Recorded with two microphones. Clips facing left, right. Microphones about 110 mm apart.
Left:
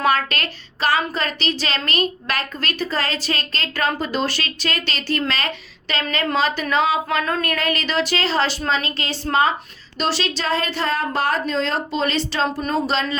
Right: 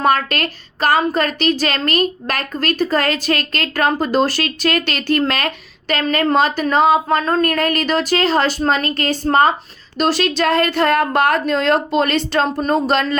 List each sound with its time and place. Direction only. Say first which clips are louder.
0.0 s a woman's voice: right 3 dB; 45° right (ahead or behind)
7.2 s speech: right 5 dB; 30° right (ahead or behind)
7.4 s a woman's voice: right 6 dB; 45° right (ahead or behind)